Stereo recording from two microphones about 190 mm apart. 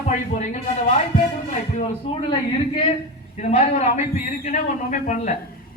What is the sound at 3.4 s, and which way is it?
A man's voice, 40° left (ahead or behind).